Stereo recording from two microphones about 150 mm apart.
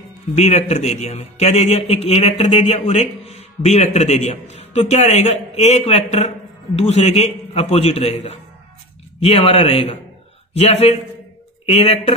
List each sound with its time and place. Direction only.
0.4 s a man's voice: 50° left (ahead or behind)